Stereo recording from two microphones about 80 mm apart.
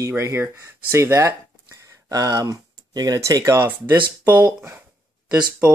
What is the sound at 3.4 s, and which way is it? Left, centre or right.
Speech, right.